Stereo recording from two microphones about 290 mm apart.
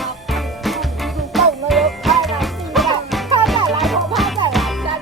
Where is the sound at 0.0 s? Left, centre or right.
Centre.